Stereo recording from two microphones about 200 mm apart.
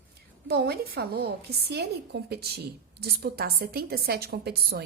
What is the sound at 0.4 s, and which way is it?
A woman's voice, 50° right (ahead or behind).